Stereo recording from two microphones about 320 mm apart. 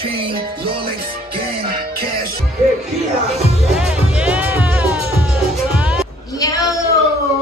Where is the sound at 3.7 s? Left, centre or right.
Centre.